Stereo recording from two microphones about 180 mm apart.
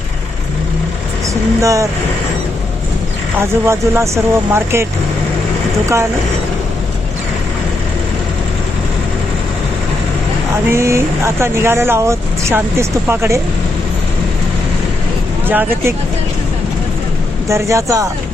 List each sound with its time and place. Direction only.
1.3 s vehicle: 20° right (ahead or behind)
3.4 s speech: 15° right (ahead or behind)
10.7 s speech: 15° right (ahead or behind)
15.4 s speech: 10° right (ahead or behind)
17.5 s speech: 15° right (ahead or behind)